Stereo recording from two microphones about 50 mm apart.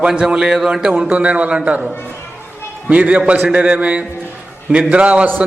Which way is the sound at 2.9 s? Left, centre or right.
Right.